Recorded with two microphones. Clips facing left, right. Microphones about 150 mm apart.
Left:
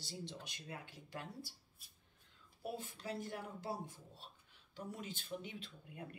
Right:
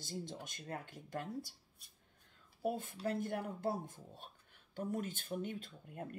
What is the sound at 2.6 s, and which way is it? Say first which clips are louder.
Speech: right 7 dB; 50° right (ahead or behind).